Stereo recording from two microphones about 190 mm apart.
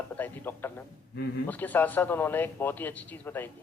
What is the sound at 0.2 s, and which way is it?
A man's voice, 10° left (ahead or behind).